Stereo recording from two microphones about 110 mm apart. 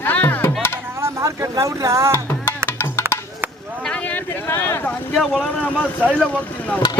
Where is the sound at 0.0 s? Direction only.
15° left (ahead or behind).